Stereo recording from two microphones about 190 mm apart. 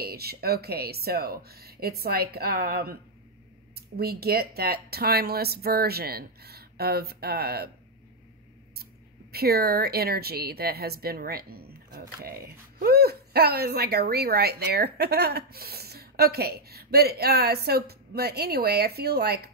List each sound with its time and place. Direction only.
0.0 s a woman's voice: 55° right (ahead or behind)
9.3 s a woman's voice: 55° right (ahead or behind)